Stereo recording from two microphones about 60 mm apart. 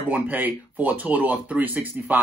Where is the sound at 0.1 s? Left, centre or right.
Right.